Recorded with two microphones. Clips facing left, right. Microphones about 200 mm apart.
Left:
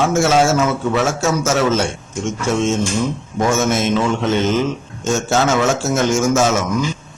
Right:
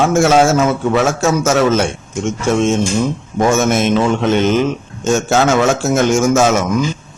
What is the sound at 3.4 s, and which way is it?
Speech, 55° right (ahead or behind).